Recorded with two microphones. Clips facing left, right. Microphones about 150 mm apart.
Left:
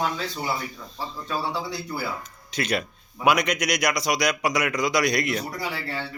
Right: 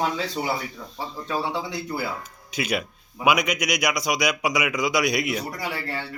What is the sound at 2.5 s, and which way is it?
A man's voice, 5° right (ahead or behind).